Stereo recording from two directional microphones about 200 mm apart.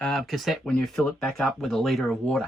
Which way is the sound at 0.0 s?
Centre (ahead or behind).